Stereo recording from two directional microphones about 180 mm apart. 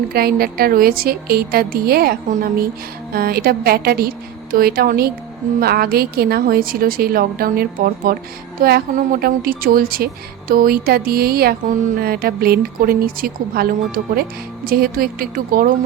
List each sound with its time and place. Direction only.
0.1 s speech: 55° right (ahead or behind)